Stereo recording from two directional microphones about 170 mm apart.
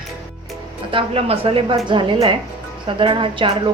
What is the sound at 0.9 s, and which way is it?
A woman's voice, 35° right (ahead or behind).